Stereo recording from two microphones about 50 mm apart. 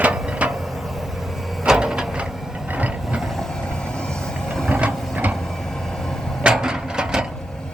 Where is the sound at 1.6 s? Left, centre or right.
Centre.